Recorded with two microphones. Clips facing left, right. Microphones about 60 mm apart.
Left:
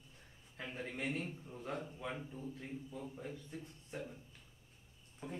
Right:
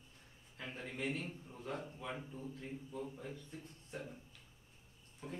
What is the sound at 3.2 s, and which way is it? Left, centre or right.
Speech, centre.